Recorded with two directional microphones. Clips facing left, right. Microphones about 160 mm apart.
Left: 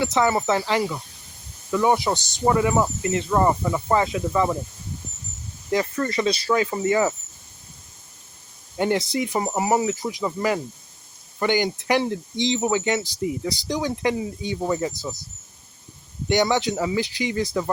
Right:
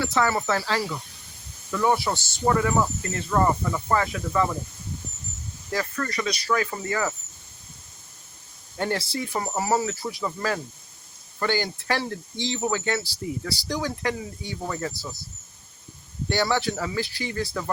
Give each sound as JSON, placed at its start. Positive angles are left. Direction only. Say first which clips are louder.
{"t": 0.0, "sound": "speech", "louder": "left 3 dB", "side_deg": 20}
{"t": 5.7, "sound": "speech", "louder": "left 5 dB", "side_deg": 25}
{"t": 8.8, "sound": "speech", "louder": "left 5 dB", "side_deg": 20}
{"t": 16.3, "sound": "speech", "louder": "left 4 dB", "side_deg": 20}